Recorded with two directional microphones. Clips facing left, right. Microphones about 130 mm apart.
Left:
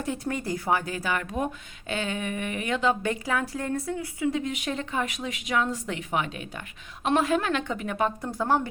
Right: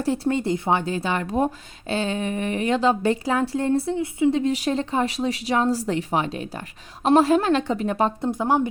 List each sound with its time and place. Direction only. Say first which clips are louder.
0.0 s speech: right 7 dB; 30° right (ahead or behind)
8.3 s speech: right 4 dB; 20° right (ahead or behind)